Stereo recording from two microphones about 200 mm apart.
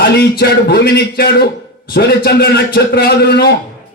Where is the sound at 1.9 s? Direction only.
55° left (ahead or behind).